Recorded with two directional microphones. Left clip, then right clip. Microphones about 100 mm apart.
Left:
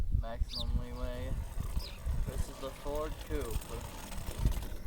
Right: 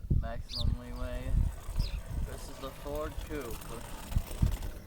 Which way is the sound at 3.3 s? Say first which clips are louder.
Even; centre (ahead or behind).